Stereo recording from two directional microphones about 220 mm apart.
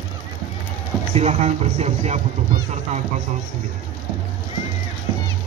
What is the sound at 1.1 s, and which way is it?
Speech, 30° right (ahead or behind).